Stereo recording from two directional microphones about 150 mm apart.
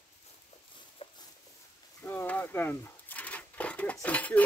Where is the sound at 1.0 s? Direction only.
35° left (ahead or behind).